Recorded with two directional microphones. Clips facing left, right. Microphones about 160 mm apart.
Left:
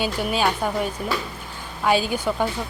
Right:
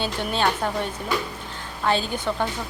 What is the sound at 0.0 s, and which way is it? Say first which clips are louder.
A woman's voice: left 2 dB; 10° left (ahead or behind).